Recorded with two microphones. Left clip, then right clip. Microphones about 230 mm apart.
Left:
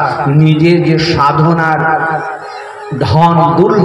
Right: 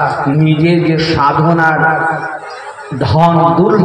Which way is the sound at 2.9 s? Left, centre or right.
Left.